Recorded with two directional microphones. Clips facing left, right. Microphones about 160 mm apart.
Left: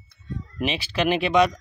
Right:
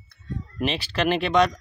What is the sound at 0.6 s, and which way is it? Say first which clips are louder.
Speech: even; centre (ahead or behind).